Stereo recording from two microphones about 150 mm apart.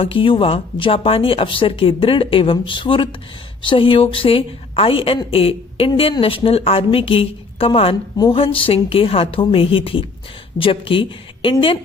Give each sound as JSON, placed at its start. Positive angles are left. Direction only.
{"t": 0.0, "sound": "a woman's voice", "side_deg": 35}